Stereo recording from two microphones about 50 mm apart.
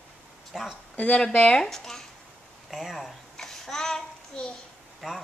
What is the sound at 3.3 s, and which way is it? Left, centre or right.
Child singing, centre.